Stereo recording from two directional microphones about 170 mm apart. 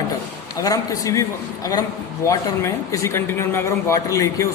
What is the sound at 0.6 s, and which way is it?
A man's voice, 20° left (ahead or behind).